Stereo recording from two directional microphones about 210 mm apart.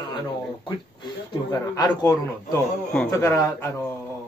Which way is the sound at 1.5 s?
15° left (ahead or behind).